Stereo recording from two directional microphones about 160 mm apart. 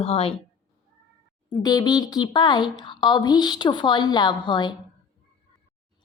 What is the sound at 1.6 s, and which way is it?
Speech, 25° left (ahead or behind).